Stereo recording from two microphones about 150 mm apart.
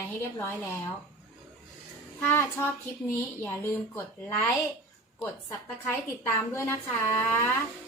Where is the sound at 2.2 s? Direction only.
15° left (ahead or behind).